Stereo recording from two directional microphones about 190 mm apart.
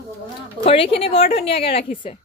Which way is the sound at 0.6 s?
30° left (ahead or behind).